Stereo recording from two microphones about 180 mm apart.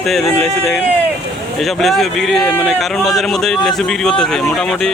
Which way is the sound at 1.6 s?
Centre (ahead or behind).